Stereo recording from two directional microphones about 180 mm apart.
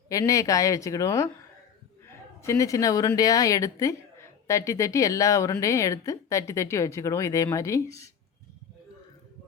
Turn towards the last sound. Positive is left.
turn(degrees=15)  # may be behind; listen again after turning